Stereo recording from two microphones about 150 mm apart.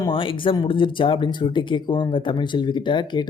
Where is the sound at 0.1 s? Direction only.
35° left (ahead or behind).